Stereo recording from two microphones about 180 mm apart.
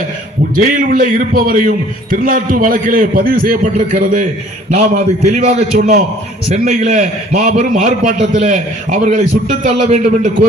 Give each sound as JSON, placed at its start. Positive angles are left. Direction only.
{"t": 0.5, "sound": "a man's voice", "side_deg": -45}